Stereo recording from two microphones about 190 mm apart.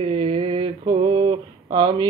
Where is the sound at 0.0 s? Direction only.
30° right (ahead or behind).